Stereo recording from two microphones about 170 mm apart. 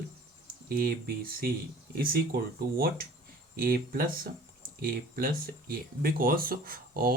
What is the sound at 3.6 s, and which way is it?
Speech, 60° right (ahead or behind).